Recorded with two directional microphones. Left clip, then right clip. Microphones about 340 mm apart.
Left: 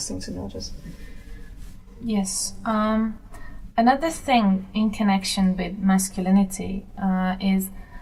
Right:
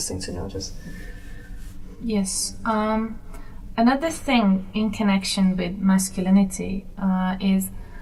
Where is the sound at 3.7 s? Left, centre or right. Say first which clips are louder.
Left 2 dB; centre.